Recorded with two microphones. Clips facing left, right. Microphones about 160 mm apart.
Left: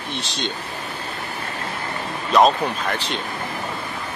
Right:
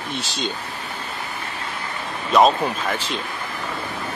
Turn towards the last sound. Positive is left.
turn(degrees=0)  # may be behind; listen again after turning